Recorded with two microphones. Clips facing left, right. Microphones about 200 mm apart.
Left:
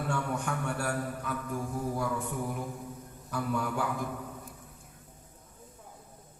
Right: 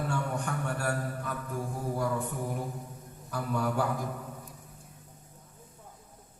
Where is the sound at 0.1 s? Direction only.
40° right (ahead or behind).